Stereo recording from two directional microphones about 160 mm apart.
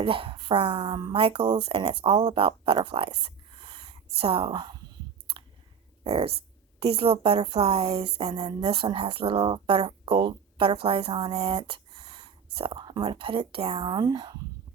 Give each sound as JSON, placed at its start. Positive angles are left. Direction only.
{"t": 0.0, "sound": "a woman's voice", "side_deg": -35}
{"t": 3.2, "sound": "a sound", "side_deg": -35}
{"t": 4.2, "sound": "a woman's voice", "side_deg": -35}
{"t": 6.1, "sound": "a woman's voice", "side_deg": -35}